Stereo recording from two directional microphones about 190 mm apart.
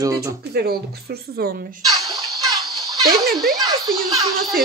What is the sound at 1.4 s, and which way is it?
Speech, 55° right (ahead or behind).